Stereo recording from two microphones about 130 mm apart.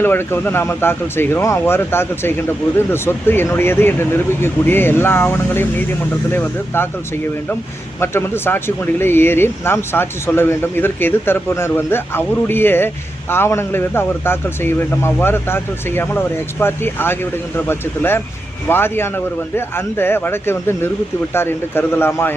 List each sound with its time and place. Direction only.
0.0 s speech: 15° left (ahead or behind)
7.9 s speech: 20° left (ahead or behind)